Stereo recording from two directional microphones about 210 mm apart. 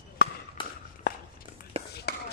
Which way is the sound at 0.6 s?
25° left (ahead or behind).